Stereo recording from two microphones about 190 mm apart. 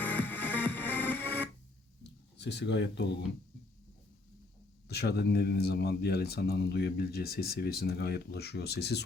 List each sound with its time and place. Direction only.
0.0 s music: 10° left (ahead or behind)
2.4 s speech: 65° left (ahead or behind)
4.9 s speech: 60° left (ahead or behind)